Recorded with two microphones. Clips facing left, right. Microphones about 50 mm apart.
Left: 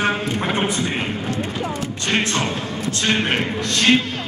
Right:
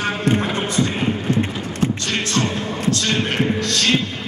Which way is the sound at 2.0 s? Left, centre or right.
Left.